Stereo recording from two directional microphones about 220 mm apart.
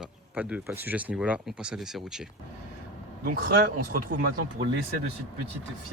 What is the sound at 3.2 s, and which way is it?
Speech, 45° right (ahead or behind).